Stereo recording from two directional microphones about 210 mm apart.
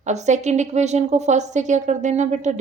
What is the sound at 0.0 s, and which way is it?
A woman's voice, 35° right (ahead or behind).